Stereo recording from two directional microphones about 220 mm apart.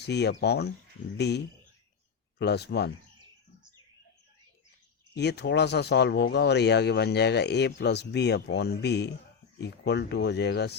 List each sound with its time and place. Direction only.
0.0 s speech: 50° left (ahead or behind)
2.4 s speech: 50° left (ahead or behind)
5.1 s speech: 50° left (ahead or behind)